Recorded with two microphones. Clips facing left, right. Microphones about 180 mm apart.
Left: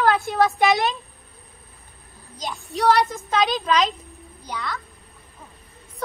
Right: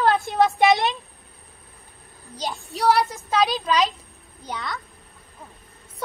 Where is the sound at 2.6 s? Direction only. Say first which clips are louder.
Left 1 dB; centre (ahead or behind).